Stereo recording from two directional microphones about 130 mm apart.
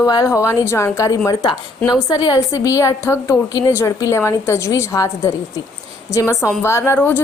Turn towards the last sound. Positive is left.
turn(degrees=15)  # may be behind; listen again after turning